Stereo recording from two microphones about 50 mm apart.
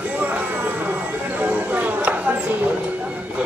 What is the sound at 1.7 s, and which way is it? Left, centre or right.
Chopping, right.